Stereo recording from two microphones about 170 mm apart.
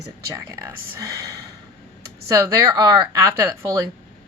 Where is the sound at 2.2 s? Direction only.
20° right (ahead or behind).